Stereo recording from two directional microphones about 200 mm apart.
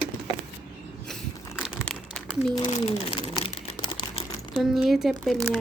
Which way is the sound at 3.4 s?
25° left (ahead or behind).